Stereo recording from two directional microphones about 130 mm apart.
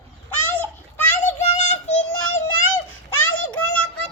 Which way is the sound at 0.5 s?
15° left (ahead or behind).